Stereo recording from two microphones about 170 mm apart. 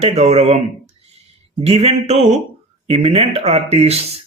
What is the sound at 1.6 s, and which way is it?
Speech, 35° right (ahead or behind).